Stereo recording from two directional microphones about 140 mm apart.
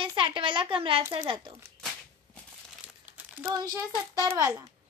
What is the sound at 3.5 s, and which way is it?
A child's voice, 25° right (ahead or behind).